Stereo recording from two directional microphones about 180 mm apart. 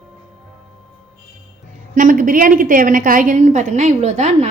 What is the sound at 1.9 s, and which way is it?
A woman's voice, 45° right (ahead or behind).